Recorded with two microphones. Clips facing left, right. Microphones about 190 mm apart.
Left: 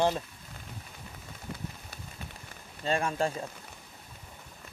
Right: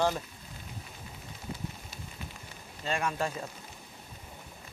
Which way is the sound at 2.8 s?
35° left (ahead or behind).